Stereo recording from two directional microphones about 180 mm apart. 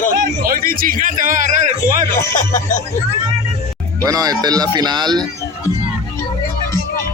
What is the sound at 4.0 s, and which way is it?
Speech, 20° right (ahead or behind).